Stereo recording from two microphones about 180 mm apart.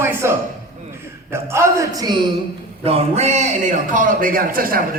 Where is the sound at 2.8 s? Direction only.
35° right (ahead or behind).